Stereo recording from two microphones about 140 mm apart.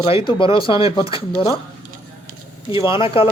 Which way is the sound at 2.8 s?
40° left (ahead or behind).